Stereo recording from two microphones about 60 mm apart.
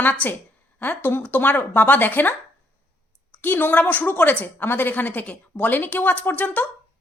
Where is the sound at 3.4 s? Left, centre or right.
Left.